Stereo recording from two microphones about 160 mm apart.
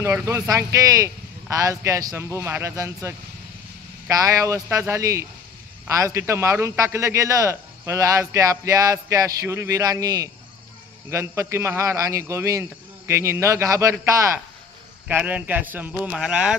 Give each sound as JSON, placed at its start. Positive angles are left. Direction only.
{"t": 0.0, "sound": "a man's voice", "side_deg": -15}
{"t": 15.0, "sound": "a man's voice", "side_deg": -10}